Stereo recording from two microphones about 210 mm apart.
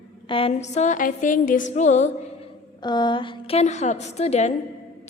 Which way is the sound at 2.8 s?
20° left (ahead or behind).